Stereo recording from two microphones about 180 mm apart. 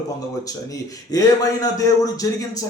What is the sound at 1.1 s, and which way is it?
A man's voice, 20° left (ahead or behind).